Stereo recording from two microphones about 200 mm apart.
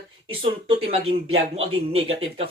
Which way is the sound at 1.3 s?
30° right (ahead or behind).